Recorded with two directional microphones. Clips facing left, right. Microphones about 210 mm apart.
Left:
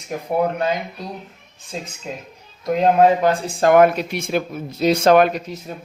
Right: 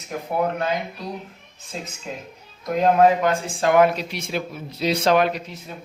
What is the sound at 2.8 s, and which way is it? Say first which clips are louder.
Speech: left 2 dB; 35° left (ahead or behind).